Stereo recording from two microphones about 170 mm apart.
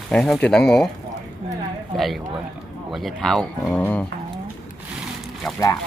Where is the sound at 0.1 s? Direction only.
5° left (ahead or behind).